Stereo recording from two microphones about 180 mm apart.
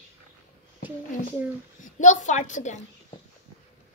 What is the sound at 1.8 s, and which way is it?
Speech, 45° left (ahead or behind).